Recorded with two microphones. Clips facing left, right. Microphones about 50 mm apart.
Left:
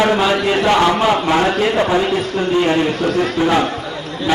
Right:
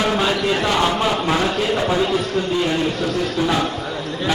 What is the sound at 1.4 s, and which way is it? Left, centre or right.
A man's voice, left.